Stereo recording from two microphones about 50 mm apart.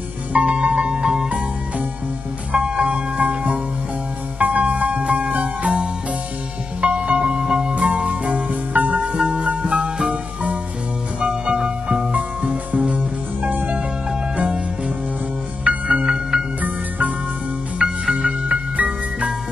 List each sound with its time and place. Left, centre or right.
0.3 s music: right
2.5 s music: centre
11.1 s music: right
15.6 s music: right
17.7 s music: centre